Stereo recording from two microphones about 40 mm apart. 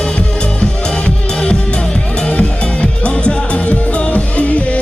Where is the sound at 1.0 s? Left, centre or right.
Left.